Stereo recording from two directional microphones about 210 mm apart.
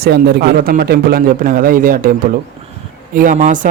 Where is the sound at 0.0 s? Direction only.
50° right (ahead or behind).